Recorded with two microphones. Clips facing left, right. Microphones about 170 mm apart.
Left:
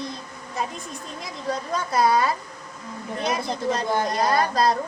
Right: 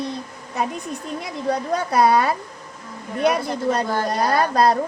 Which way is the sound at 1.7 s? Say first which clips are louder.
Right 3 dB; 65° right (ahead or behind).